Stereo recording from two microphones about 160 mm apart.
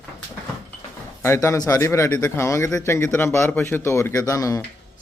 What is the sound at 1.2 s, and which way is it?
Speech, 15° left (ahead or behind).